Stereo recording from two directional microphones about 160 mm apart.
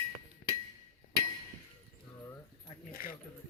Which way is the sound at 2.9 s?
65° left (ahead or behind).